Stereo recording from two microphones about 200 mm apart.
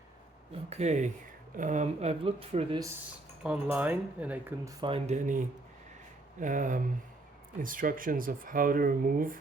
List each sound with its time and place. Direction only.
0.7 s speech: 35° right (ahead or behind)
3.4 s speech: 5° right (ahead or behind)
4.8 s speech: 30° right (ahead or behind)
6.4 s speech: 40° right (ahead or behind)